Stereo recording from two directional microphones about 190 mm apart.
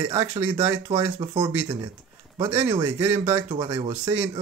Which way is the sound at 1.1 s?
25° right (ahead or behind).